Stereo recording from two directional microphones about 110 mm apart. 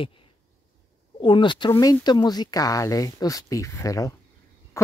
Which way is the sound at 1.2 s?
45° left (ahead or behind).